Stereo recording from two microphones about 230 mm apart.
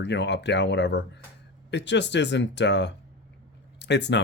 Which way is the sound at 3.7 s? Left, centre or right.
Left.